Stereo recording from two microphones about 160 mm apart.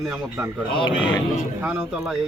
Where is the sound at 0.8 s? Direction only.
30° left (ahead or behind).